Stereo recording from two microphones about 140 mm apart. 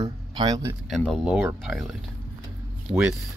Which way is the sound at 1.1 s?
5° right (ahead or behind).